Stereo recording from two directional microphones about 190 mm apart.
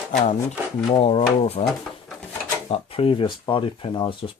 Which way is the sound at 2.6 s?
30° left (ahead or behind).